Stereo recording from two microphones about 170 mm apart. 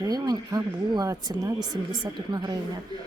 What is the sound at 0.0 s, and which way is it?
Speech, 20° right (ahead or behind).